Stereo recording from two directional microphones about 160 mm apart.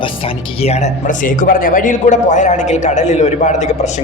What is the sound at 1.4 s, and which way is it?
A man's voice, 60° left (ahead or behind).